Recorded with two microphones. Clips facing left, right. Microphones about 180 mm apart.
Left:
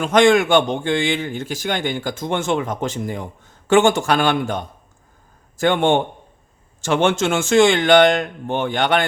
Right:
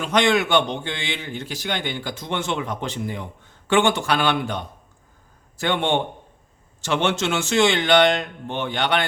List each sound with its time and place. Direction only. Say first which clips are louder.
0.0 s a man's voice: left 6 dB; 50° left (ahead or behind)